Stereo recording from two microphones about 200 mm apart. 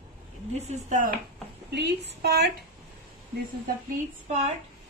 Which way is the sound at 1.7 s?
60° right (ahead or behind).